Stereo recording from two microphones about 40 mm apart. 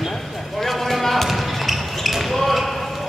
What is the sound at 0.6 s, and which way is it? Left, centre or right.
Basketball bounce, centre.